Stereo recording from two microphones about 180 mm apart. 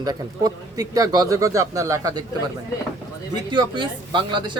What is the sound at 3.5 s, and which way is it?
Speech, 25° right (ahead or behind).